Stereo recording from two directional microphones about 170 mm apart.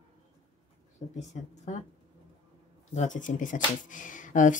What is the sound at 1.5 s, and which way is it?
Speech, 45° left (ahead or behind).